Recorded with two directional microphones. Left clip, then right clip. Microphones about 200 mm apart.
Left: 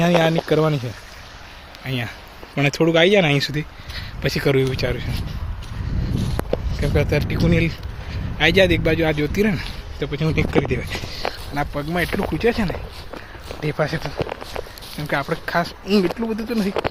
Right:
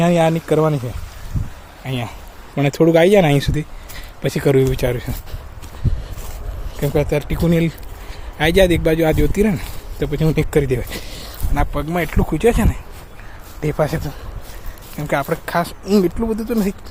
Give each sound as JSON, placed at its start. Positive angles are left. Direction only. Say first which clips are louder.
{"t": 0.0, "sound": "speech", "louder": "right 2 dB", "side_deg": -5}
{"t": 1.8, "sound": "speech", "louder": "right 1 dB", "side_deg": -5}
{"t": 2.6, "sound": "speech", "louder": "right 3 dB", "side_deg": -15}
{"t": 2.9, "sound": "speech", "louder": "right 3 dB", "side_deg": -30}
{"t": 6.7, "sound": "speech", "louder": "right 4 dB", "side_deg": -15}
{"t": 10.0, "sound": "speech", "louder": "right 3 dB", "side_deg": -30}
{"t": 11.5, "sound": "speech", "louder": "right 5 dB", "side_deg": -5}
{"t": 14.9, "sound": "speech", "louder": "right 3 dB", "side_deg": -10}
{"t": 15.9, "sound": "speech", "louder": "right 4 dB", "side_deg": -15}